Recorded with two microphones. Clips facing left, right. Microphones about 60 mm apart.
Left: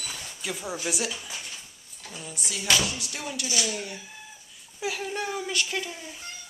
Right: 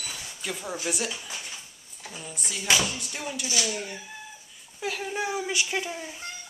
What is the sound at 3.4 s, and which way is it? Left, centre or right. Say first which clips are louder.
Speech: even; centre.